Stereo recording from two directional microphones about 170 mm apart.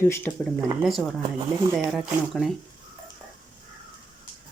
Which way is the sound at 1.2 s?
25° right (ahead or behind).